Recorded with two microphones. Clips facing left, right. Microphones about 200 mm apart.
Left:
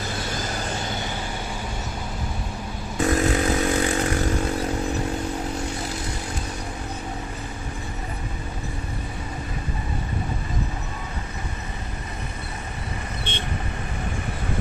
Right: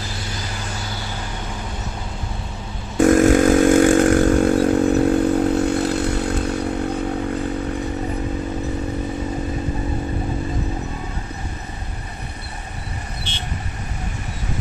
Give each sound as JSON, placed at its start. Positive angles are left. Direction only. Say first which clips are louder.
{"t": 0.0, "sound": "vehicle", "louder": "left 2 dB", "side_deg": 55}
{"t": 3.0, "sound": "chainsaw", "louder": "right 9 dB", "side_deg": -50}
{"t": 13.3, "sound": "vehicle", "louder": "left 2 dB", "side_deg": 55}